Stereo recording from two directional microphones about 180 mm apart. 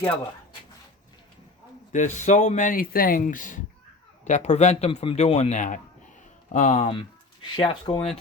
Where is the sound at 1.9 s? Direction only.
45° left (ahead or behind).